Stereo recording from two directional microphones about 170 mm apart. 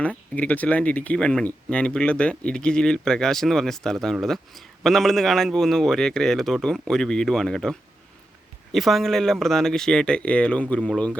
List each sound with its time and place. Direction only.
0.0 s speech: 10° left (ahead or behind)